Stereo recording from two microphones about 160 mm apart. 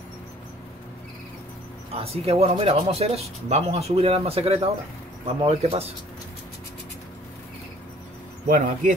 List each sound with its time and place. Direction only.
2.0 s speech: 40° right (ahead or behind)
8.5 s speech: 60° right (ahead or behind)